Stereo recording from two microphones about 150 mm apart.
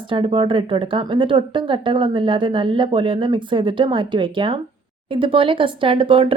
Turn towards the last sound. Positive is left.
turn(degrees=-35)  # may be behind; listen again after turning